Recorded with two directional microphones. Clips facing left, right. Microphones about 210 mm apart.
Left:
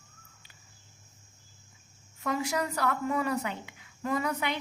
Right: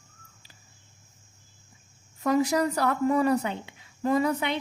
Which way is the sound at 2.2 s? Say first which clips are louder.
Right 7 dB; 35° right (ahead or behind).